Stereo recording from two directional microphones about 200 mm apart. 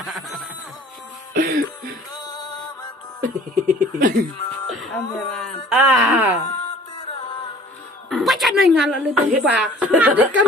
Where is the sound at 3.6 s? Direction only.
45° right (ahead or behind).